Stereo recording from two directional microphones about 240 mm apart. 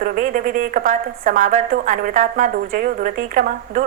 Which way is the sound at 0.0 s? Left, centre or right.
Right.